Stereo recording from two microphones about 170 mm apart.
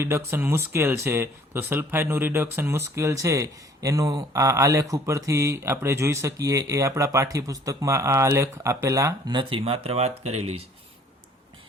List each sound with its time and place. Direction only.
0.3 s speech: 15° right (ahead or behind); by 10.5 s 40° right (ahead or behind)